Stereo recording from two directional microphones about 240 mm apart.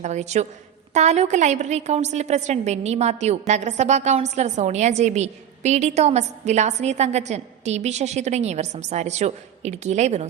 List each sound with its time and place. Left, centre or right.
0.0 s a woman's voice: right